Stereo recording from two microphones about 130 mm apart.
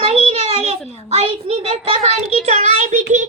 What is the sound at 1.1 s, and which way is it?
A child's voice, 45° right (ahead or behind).